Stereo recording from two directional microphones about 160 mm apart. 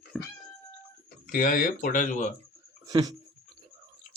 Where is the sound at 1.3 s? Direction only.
60° left (ahead or behind).